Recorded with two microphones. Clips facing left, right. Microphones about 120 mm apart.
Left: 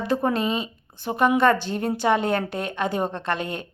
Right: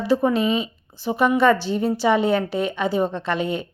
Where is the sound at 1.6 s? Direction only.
50° left (ahead or behind).